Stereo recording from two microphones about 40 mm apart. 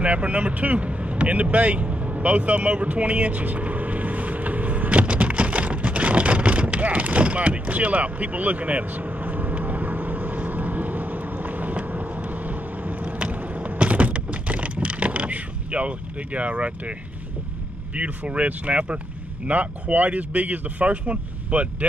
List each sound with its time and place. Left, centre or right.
0.0 s vehicle: right
13.7 s a sound: right
17.9 s speech: right